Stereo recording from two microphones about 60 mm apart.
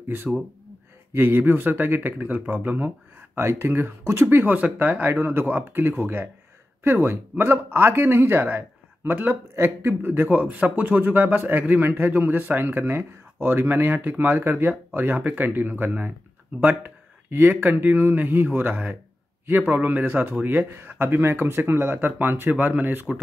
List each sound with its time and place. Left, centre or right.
1.1 s speech: right
3.3 s speech: right
4.0 s speech: right
4.3 s speech: right
10.3 s speech: right